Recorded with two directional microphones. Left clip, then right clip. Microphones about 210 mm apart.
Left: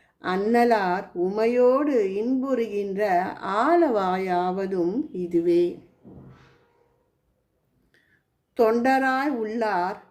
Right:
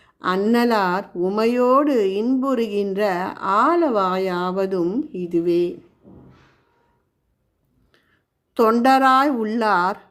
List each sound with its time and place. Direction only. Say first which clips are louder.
0.0 s speech: right 5 dB; 30° right (ahead or behind)
8.5 s speech: right 5 dB; 35° right (ahead or behind)